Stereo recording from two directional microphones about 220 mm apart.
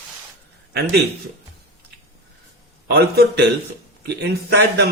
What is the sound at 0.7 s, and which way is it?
Speech, 50° right (ahead or behind).